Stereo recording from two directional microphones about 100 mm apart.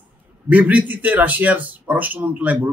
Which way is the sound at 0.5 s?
15° right (ahead or behind).